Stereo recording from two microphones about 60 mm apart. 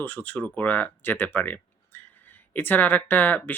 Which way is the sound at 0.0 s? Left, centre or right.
Left.